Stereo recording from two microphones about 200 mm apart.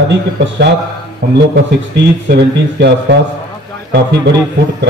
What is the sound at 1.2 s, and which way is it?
A man's voice, 50° right (ahead or behind).